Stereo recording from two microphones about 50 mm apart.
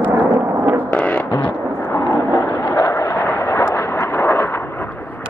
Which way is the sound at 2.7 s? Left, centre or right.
Left.